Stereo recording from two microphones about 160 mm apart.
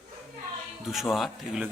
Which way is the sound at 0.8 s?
Centre (ahead or behind).